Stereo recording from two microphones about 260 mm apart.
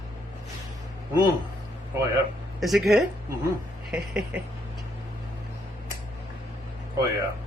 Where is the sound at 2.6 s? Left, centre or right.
Centre.